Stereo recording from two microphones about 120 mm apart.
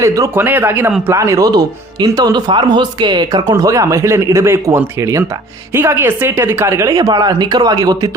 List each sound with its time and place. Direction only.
0.0 s speech: 25° right (ahead or behind)
3.5 s speech: 30° right (ahead or behind)